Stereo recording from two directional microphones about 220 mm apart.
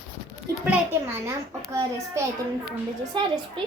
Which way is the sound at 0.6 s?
10° right (ahead or behind).